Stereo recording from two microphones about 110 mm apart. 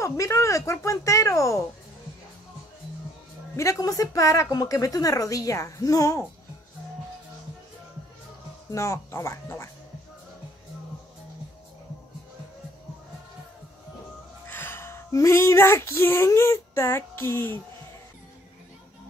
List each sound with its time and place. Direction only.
0.0 s speech: 30° left (ahead or behind)
3.5 s a woman's voice: 30° left (ahead or behind)
8.7 s speech: 30° left (ahead or behind)
14.5 s female singing: 20° left (ahead or behind)